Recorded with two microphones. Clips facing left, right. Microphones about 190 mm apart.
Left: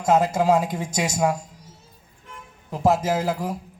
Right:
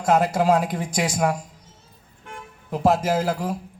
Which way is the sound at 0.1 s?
15° left (ahead or behind).